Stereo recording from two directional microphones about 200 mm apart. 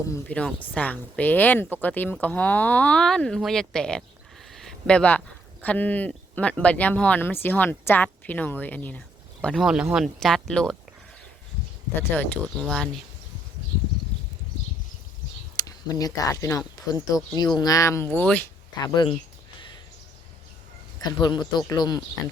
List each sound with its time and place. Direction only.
0.1 s speech: 5° left (ahead or behind)
4.5 s a sound: centre (ahead or behind)
5.6 s speech: 10° left (ahead or behind)
11.9 s speech: 10° left (ahead or behind)
15.5 s speech: 20° left (ahead or behind)
18.8 s speech: 20° left (ahead or behind)
21.0 s speech: 20° left (ahead or behind)